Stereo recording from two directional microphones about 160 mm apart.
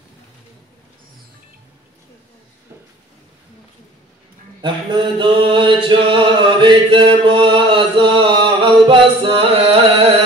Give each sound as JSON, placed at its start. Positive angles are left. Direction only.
{"t": 4.6, "sound": "mantra", "side_deg": -30}
{"t": 5.9, "sound": "chant", "side_deg": -30}